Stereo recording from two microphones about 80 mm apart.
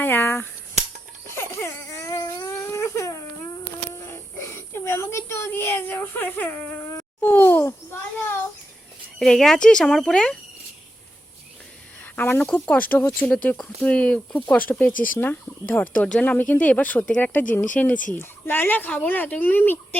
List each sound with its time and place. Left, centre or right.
0.0 s speech: left
1.4 s baby cry: left
2.5 s a sound: left
5.5 s speech: left
9.1 s speech: centre
12.1 s speech: left